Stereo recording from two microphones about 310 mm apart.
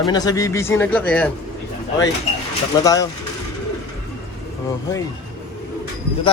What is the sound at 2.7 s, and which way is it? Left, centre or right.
Speech, centre.